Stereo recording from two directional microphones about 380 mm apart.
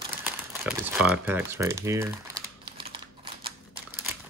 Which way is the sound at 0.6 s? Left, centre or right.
Centre.